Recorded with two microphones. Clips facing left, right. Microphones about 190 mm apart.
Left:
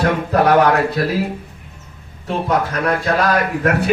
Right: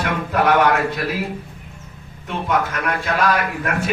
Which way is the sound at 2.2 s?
35° left (ahead or behind).